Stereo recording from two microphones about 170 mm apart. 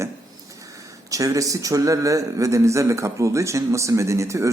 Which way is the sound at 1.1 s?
20° right (ahead or behind).